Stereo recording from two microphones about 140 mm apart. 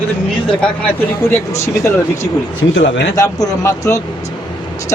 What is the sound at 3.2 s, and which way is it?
Speech, 25° left (ahead or behind).